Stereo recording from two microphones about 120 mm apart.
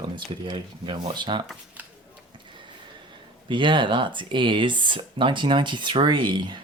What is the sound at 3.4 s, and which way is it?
Speech, 40° right (ahead or behind).